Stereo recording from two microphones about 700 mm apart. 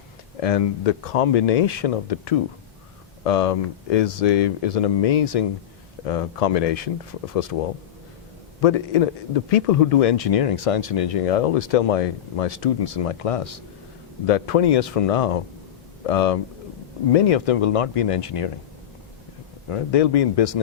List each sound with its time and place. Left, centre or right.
0.3 s speech: left
19.7 s speech: left